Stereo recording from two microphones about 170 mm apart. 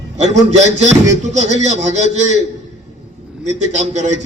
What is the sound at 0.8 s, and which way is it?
A man's voice, 45° right (ahead or behind).